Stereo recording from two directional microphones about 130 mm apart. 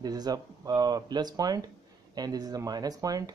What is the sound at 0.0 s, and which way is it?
Speech, 30° right (ahead or behind).